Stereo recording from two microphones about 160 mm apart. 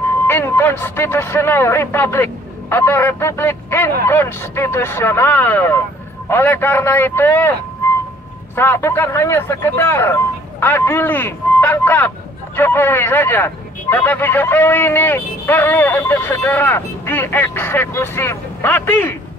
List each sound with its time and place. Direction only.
0.3 s speech: 15° left (ahead or behind)
8.5 s speech: 15° left (ahead or behind)